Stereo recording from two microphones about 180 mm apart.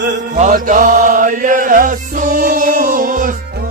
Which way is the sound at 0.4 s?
45° right (ahead or behind).